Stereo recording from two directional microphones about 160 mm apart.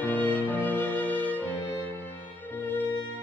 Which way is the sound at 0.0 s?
10° left (ahead or behind).